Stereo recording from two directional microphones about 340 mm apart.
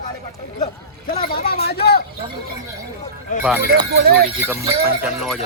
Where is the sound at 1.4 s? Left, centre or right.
Left.